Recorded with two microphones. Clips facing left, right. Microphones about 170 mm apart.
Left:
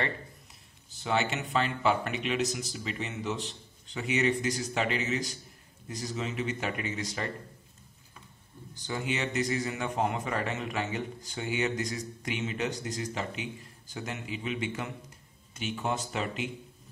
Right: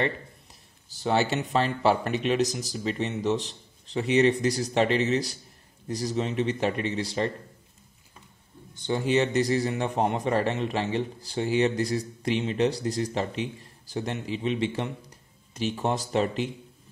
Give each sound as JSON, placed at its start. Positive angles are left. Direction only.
{"t": 0.9, "sound": "a man's voice", "side_deg": -35}
{"t": 8.8, "sound": "a man's voice", "side_deg": -35}